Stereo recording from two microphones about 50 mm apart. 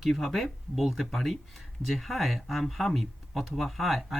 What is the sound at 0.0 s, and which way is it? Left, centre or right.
Speech, centre.